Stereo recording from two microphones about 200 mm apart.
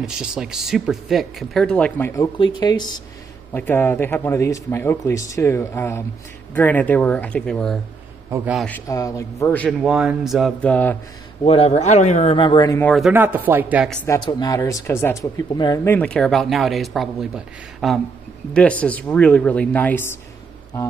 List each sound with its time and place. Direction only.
0.0 s speech: 5° right (ahead or behind); by 2.9 s 20° left (ahead or behind)
3.5 s speech: 10° left (ahead or behind)
9.8 s speech: 5° right (ahead or behind)
11.4 s speech: 30° left (ahead or behind)
12.9 s speech: 5° right (ahead or behind)
14.0 s speech: 15° left (ahead or behind)